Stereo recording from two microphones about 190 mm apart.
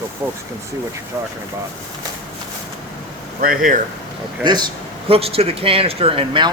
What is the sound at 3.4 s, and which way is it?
Speech, 45° right (ahead or behind).